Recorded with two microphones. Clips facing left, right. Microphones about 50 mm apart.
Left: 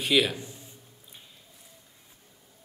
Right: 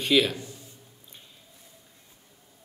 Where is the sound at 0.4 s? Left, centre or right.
Centre.